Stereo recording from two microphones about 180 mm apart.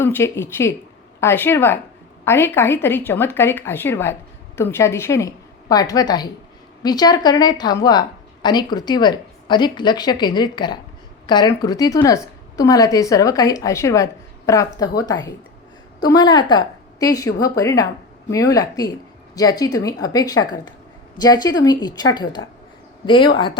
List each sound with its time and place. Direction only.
0.0 s a woman's voice: 15° left (ahead or behind)